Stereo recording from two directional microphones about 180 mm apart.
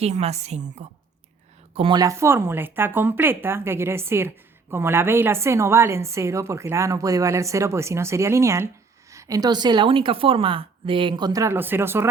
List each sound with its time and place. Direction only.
0.0 s a woman's voice: 35° right (ahead or behind)
1.7 s a woman's voice: 30° right (ahead or behind); by 12.0 s 15° right (ahead or behind)